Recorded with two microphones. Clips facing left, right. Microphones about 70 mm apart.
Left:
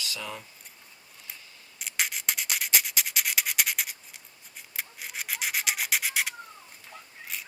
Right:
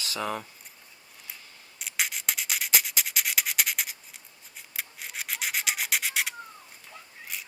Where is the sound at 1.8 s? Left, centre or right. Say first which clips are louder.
Even; centre.